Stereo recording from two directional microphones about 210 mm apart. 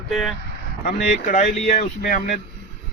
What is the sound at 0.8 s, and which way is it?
Speech, 40° left (ahead or behind).